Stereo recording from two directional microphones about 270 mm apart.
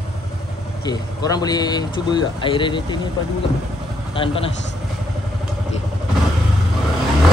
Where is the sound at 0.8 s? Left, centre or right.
Centre.